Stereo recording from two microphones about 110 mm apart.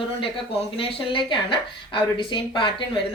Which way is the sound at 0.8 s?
50° left (ahead or behind).